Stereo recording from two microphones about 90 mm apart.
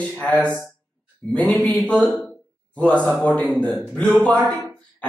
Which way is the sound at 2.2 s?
10° left (ahead or behind).